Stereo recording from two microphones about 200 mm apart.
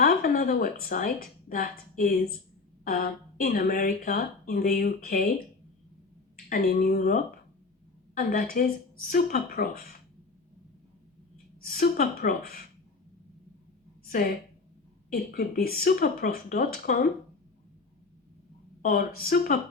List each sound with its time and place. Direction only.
0.0 s a woman's voice: 45° left (ahead or behind)
6.3 s speech: 50° left (ahead or behind)
11.6 s speech: 45° left (ahead or behind)
14.1 s speech: 45° left (ahead or behind)
18.8 s speech: 45° left (ahead or behind)